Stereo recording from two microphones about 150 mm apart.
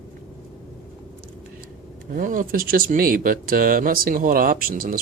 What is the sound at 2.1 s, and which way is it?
Speech, 65° right (ahead or behind).